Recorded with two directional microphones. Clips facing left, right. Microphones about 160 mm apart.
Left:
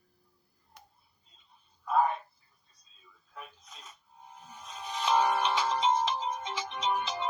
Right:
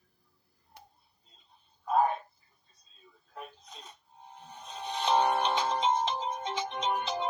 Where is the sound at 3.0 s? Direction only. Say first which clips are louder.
Right 3 dB; 40° right (ahead or behind).